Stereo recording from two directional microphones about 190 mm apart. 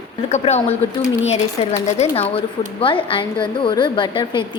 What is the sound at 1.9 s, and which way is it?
A woman's voice, 30° left (ahead or behind).